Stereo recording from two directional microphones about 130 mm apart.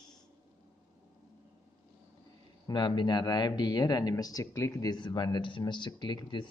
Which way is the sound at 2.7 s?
35° left (ahead or behind).